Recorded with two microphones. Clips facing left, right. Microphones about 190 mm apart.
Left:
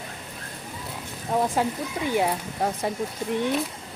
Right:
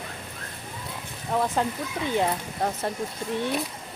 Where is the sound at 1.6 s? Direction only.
10° left (ahead or behind).